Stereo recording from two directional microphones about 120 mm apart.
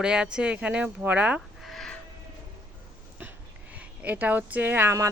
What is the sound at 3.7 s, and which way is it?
Speech, 10° right (ahead or behind).